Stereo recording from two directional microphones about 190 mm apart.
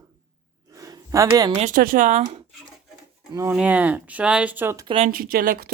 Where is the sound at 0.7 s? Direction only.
20° right (ahead or behind).